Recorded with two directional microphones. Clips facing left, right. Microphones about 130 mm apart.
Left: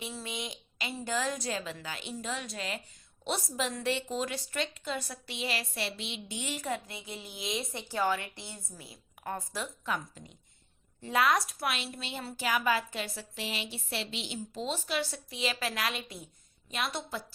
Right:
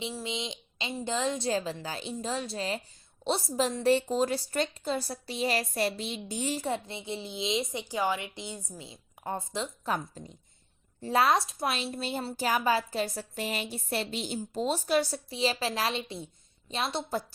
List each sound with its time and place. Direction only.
0.0 s a woman's voice: 20° right (ahead or behind)
9.8 s a woman's voice: 35° right (ahead or behind)